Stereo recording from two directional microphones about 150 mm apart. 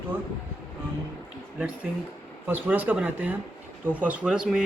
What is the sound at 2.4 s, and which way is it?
Speech, 15° right (ahead or behind).